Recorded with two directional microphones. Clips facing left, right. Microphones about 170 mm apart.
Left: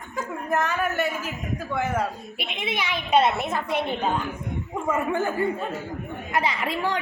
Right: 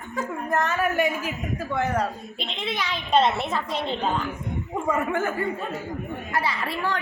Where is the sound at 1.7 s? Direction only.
Centre (ahead or behind).